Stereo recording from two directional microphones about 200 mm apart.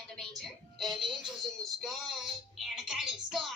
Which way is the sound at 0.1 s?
Centre (ahead or behind).